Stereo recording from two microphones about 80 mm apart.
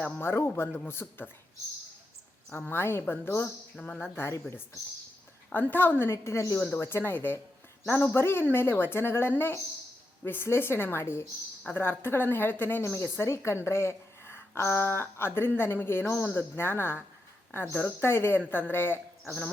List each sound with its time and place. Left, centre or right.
0.0 s speech: left
2.6 s speech: left
3.8 s speech: centre
4.1 s speech: left